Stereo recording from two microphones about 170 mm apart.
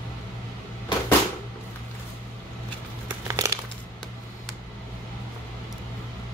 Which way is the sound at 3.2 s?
15° right (ahead or behind).